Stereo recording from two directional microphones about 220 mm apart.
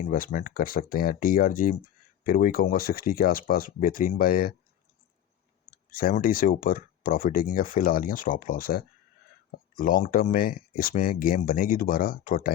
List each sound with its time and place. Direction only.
0.0 s speech: 40° left (ahead or behind)
5.9 s speech: 40° left (ahead or behind)